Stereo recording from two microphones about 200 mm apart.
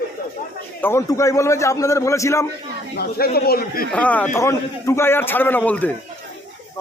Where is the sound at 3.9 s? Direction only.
5° left (ahead or behind).